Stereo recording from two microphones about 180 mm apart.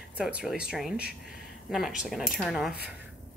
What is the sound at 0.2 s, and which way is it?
A woman's voice, 5° right (ahead or behind).